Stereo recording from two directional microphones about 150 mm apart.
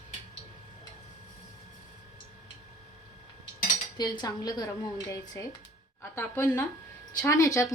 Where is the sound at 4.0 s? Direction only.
25° left (ahead or behind).